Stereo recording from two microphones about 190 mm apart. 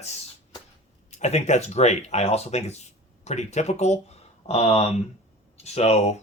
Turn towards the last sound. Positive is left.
turn(degrees=35)  # may be behind; listen again after turning